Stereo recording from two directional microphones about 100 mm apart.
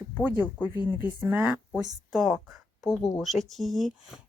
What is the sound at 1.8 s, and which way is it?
Speech, centre (ahead or behind).